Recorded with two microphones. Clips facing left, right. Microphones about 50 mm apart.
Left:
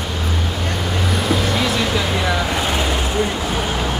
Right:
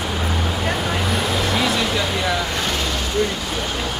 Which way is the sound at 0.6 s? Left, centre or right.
Centre.